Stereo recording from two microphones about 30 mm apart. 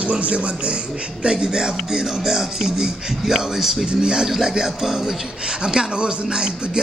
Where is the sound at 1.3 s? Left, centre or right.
Right.